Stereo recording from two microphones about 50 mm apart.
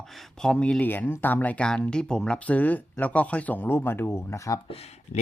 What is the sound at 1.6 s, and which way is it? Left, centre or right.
Speech, centre.